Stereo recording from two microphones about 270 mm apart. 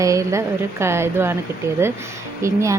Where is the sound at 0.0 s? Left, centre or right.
Centre.